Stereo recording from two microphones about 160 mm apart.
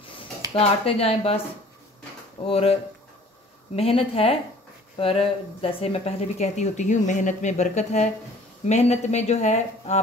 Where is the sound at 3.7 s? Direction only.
35° left (ahead or behind).